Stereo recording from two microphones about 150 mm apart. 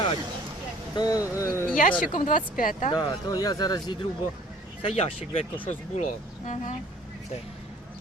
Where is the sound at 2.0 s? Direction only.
65° left (ahead or behind).